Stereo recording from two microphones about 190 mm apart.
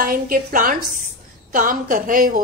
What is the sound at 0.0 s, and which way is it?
A woman's voice, 50° right (ahead or behind).